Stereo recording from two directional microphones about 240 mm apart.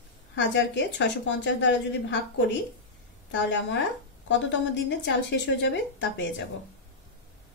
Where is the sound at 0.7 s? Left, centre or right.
Left.